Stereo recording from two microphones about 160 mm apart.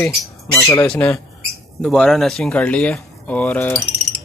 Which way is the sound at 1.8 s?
Centre (ahead or behind).